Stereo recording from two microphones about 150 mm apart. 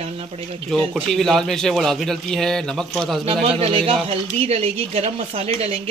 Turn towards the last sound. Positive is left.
turn(degrees=-45)  # may be behind; listen again after turning